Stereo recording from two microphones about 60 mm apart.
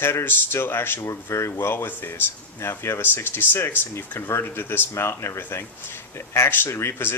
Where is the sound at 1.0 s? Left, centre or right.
Left.